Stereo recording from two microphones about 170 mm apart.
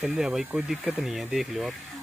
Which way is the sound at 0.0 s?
5° right (ahead or behind).